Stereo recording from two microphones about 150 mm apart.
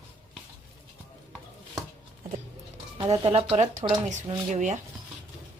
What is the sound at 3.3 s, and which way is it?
A woman's voice, 45° right (ahead or behind).